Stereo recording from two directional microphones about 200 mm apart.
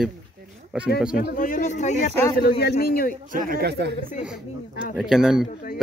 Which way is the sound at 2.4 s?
50° left (ahead or behind).